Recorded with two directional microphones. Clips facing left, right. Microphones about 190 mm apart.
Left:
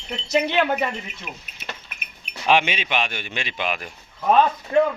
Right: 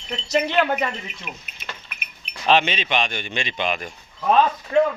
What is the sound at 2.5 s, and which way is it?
A man's voice, 10° left (ahead or behind).